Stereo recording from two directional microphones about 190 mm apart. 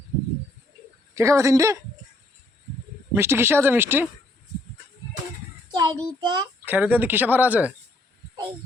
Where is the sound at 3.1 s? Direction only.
15° right (ahead or behind).